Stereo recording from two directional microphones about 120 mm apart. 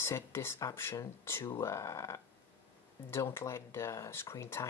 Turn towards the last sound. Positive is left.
turn(degrees=20)  # may be behind; listen again after turning